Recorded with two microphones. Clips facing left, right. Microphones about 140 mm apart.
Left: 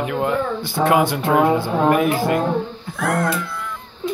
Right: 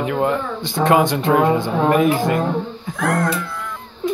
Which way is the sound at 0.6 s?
10° left (ahead or behind).